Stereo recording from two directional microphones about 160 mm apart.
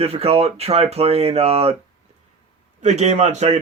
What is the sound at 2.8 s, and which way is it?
Speech, 45° right (ahead or behind).